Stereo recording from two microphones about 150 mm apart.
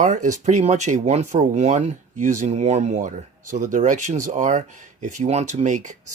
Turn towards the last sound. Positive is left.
turn(degrees=-55)  # may be behind; listen again after turning